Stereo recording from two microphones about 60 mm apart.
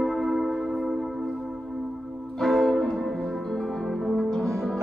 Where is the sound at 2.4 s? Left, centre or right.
Centre.